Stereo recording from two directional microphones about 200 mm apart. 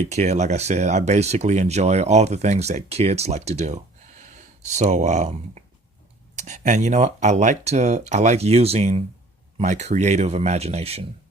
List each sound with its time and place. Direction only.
0.1 s speech: 35° right (ahead or behind)